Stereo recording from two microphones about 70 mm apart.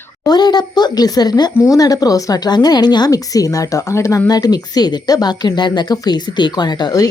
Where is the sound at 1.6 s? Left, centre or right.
Left.